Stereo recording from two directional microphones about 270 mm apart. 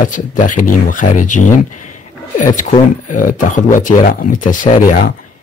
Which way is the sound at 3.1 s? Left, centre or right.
Left.